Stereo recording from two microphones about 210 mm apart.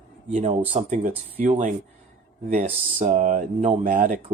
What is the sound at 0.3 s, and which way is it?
A man's voice, 30° right (ahead or behind).